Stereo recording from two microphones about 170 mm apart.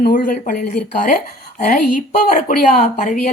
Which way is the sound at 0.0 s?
55° left (ahead or behind).